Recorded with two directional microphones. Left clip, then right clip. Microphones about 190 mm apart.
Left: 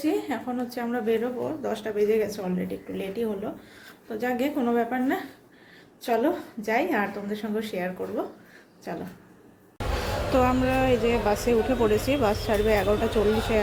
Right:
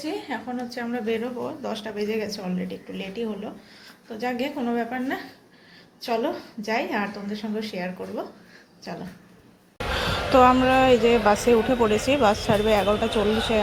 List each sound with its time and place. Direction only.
0.0 s a woman's voice: 20° left (ahead or behind)
9.9 s a woman's voice: centre (ahead or behind)